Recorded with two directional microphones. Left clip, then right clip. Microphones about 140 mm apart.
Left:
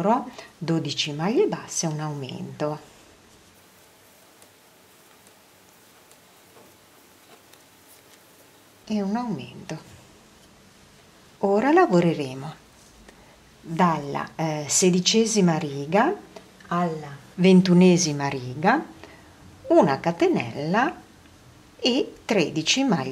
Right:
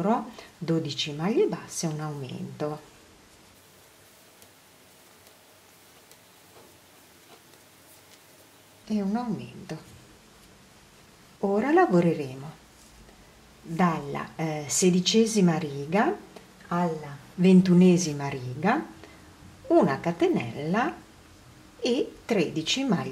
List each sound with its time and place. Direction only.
0.0 s speech: 20° left (ahead or behind)
8.8 s speech: 15° left (ahead or behind)
11.4 s a woman's voice: 20° left (ahead or behind)
13.7 s a woman's voice: 20° left (ahead or behind)